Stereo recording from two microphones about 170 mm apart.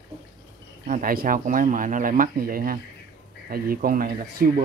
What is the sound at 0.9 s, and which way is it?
Speech, 55° right (ahead or behind).